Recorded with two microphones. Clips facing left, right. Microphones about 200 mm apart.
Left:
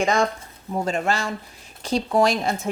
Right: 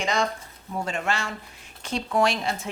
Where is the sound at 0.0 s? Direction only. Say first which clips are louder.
Left 5 dB; 50° left (ahead or behind).